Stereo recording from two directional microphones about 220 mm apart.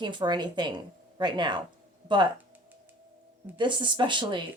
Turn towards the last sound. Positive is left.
turn(degrees=-20)  # may be behind; listen again after turning